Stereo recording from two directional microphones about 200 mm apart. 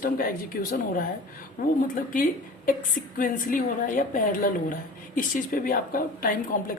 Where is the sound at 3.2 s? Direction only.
40° left (ahead or behind).